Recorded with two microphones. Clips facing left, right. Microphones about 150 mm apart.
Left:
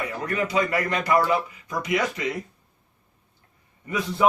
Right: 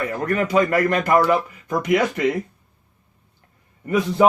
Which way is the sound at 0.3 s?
50° right (ahead or behind).